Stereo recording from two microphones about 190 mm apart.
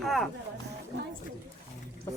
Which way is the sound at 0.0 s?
Centre (ahead or behind).